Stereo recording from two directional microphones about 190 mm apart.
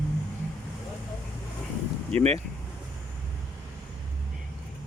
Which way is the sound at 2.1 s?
35° right (ahead or behind).